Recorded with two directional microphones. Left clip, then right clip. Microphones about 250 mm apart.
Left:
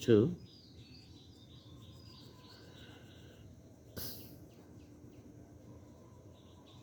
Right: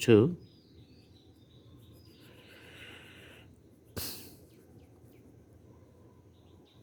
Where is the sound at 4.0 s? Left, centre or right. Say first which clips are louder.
Right 6 dB; right.